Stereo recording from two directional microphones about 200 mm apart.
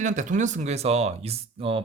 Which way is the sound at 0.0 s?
40° right (ahead or behind).